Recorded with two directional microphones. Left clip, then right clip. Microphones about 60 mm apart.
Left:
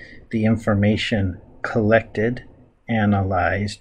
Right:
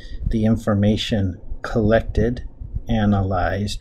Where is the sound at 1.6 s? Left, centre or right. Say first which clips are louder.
Left 1 dB; right.